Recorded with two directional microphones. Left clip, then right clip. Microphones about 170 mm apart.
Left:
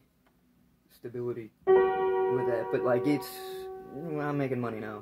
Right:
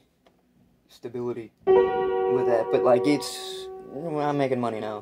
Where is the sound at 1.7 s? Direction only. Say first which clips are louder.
Right 4 dB; 45° right (ahead or behind).